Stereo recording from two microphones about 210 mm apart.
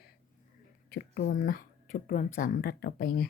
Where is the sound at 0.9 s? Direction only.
50° left (ahead or behind).